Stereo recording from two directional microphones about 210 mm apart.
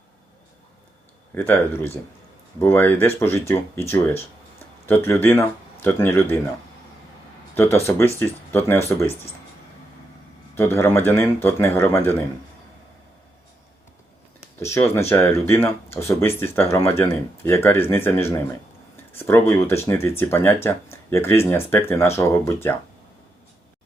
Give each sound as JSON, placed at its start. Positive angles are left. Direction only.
{"t": 1.3, "sound": "speech", "side_deg": 10}
{"t": 7.5, "sound": "speech", "side_deg": 10}
{"t": 10.5, "sound": "speech", "side_deg": 10}
{"t": 14.6, "sound": "speech", "side_deg": 15}